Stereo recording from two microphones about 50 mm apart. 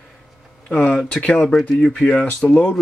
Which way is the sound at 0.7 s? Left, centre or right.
Left.